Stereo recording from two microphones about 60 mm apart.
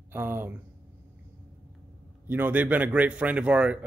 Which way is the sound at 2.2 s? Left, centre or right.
Right.